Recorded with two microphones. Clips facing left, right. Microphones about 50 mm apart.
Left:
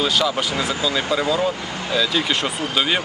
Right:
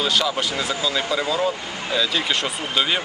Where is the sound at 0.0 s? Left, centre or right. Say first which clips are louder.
Left 2 dB; centre.